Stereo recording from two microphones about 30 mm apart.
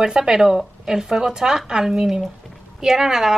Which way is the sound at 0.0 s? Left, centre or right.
Right.